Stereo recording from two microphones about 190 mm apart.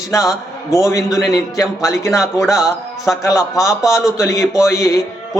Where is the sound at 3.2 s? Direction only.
15° left (ahead or behind).